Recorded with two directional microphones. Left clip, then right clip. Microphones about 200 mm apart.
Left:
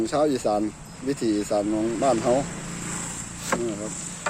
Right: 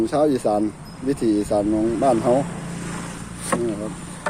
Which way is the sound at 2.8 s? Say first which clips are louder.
Even; 65° left (ahead or behind).